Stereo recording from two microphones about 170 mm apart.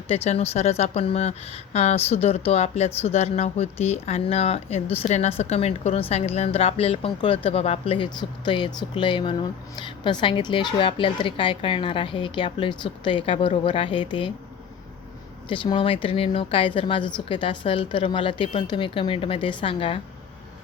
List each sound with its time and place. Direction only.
0.1 s speech: 35° left (ahead or behind)
15.4 s speech: 30° left (ahead or behind)